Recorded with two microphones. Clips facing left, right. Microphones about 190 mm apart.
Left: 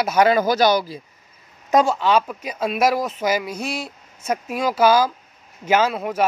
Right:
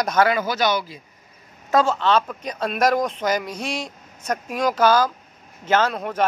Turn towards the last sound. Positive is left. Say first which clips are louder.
# left 1 dB
turn(degrees=10)  # may be behind; listen again after turning